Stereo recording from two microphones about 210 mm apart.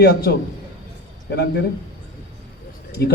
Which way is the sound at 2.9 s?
50° left (ahead or behind).